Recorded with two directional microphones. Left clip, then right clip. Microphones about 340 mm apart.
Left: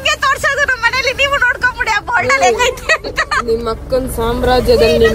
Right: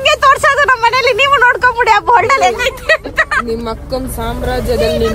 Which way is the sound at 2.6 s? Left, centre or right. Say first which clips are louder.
Right 1 dB; centre.